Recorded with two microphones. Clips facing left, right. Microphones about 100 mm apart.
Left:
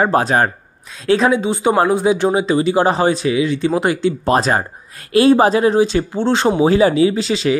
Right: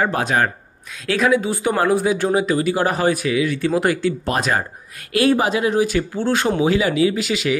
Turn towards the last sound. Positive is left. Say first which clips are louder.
# left 4 dB
turn(degrees=30)  # may be behind; listen again after turning